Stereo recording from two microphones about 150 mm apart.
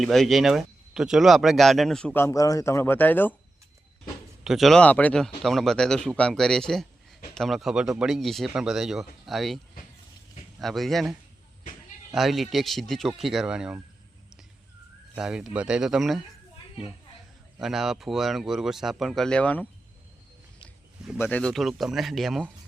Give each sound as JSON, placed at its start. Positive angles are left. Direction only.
{"t": 0.0, "sound": "a man's voice", "side_deg": 0}
{"t": 2.2, "sound": "speech", "side_deg": 25}
{"t": 4.4, "sound": "a man's voice", "side_deg": 0}
{"t": 10.6, "sound": "a man's voice", "side_deg": 0}
{"t": 12.1, "sound": "a man's voice", "side_deg": 0}
{"t": 15.1, "sound": "a man's voice", "side_deg": -5}
{"t": 17.6, "sound": "a man's voice", "side_deg": -5}
{"t": 20.6, "sound": "a sound", "side_deg": -5}
{"t": 21.2, "sound": "a man's voice", "side_deg": 10}